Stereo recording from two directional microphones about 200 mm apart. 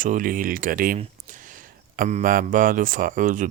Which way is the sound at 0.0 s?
40° right (ahead or behind).